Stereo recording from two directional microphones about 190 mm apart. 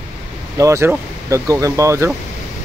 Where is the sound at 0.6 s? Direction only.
15° right (ahead or behind).